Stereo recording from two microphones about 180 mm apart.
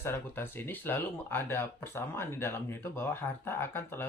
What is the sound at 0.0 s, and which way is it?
Speech, 15° left (ahead or behind).